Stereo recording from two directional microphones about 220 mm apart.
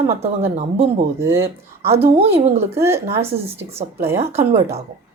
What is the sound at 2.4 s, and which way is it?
Speech, 30° right (ahead or behind).